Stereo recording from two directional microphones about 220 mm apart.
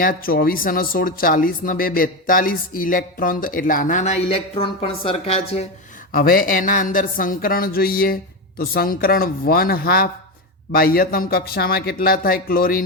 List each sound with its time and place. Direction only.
0.0 s speech: 40° left (ahead or behind)
6.1 s speech: 40° left (ahead or behind)